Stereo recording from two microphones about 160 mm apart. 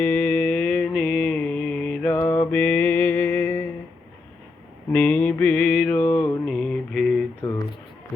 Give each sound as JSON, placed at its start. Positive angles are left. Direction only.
{"t": 0.0, "sound": "mantra", "side_deg": 10}
{"t": 4.9, "sound": "mantra", "side_deg": 10}
{"t": 6.4, "sound": "a sound", "side_deg": 5}